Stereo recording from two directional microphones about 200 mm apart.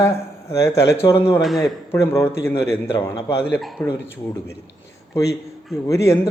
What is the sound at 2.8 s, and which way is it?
Speech, 25° left (ahead or behind).